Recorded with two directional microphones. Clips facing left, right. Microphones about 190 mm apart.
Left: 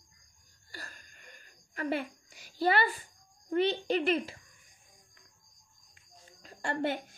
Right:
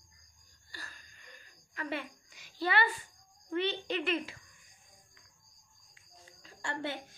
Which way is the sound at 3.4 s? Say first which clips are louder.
Left 5 dB; 40° left (ahead or behind).